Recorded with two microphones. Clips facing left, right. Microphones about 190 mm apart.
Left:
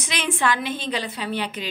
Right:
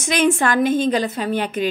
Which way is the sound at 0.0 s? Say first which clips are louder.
Right 7 dB; 45° right (ahead or behind).